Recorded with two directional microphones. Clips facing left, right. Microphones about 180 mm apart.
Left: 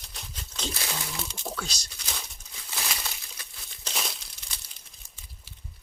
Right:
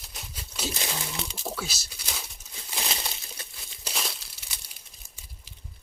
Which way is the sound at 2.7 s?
25° right (ahead or behind).